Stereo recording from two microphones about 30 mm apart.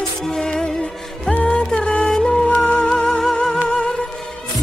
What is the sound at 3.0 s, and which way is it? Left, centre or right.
Music, centre.